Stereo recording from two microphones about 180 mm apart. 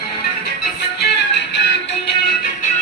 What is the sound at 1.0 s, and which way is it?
Music, 70° left (ahead or behind).